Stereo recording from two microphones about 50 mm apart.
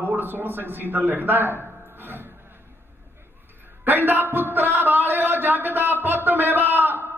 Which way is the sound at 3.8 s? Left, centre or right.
Right.